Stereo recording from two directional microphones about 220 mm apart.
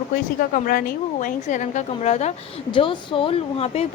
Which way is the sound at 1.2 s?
35° left (ahead or behind).